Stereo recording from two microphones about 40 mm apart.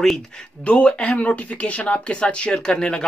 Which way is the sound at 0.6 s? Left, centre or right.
Left.